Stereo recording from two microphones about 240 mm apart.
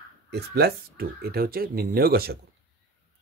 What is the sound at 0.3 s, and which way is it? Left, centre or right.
Speech, right.